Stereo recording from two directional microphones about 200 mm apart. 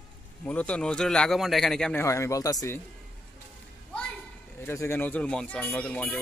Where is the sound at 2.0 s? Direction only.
15° left (ahead or behind).